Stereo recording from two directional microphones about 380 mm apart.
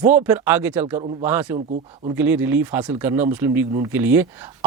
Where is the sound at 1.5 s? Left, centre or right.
Centre.